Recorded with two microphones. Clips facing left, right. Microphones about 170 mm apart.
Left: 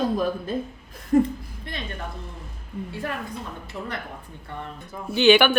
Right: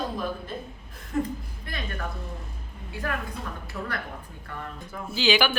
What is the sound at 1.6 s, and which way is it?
Speech, 25° left (ahead or behind).